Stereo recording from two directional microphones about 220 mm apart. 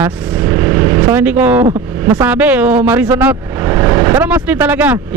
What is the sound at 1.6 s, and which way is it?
Speech, 20° right (ahead or behind).